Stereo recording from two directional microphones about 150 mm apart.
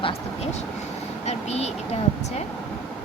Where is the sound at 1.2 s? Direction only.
45° left (ahead or behind).